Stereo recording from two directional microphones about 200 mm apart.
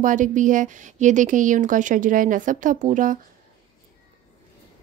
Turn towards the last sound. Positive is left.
turn(degrees=-40)  # may be behind; listen again after turning